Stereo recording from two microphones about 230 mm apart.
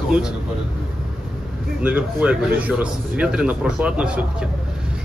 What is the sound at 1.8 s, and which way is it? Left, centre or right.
A man's voice, centre.